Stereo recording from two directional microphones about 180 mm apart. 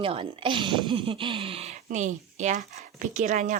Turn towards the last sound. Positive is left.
turn(degrees=-45)  # may be behind; listen again after turning